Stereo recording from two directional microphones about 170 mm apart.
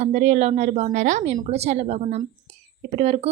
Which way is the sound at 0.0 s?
45° right (ahead or behind).